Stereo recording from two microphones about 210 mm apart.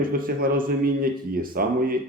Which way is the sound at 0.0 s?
40° right (ahead or behind).